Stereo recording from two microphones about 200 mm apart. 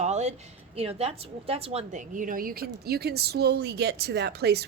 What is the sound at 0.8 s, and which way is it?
A woman's voice, 30° right (ahead or behind).